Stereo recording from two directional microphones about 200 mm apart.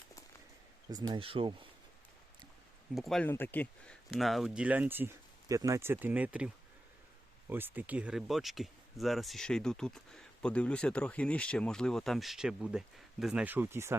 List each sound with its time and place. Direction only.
0.9 s speech: 20° right (ahead or behind)
2.9 s speech: centre (ahead or behind)
7.5 s speech: 10° right (ahead or behind)